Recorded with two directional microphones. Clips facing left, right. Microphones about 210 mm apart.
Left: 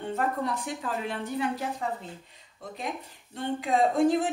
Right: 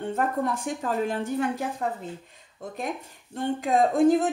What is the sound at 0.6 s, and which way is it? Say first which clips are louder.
Speech: right 5 dB; 45° right (ahead or behind).